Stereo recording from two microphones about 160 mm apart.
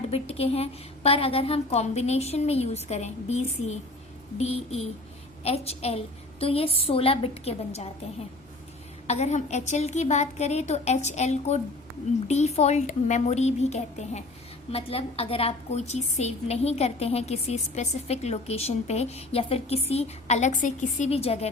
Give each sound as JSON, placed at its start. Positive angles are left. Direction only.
{"t": 0.1, "sound": "a woman's voice", "side_deg": 40}
{"t": 9.0, "sound": "a woman's voice", "side_deg": 45}